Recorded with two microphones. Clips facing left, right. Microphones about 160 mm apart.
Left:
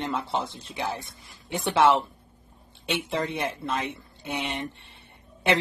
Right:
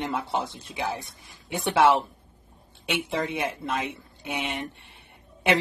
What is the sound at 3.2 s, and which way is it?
Speech, 10° right (ahead or behind).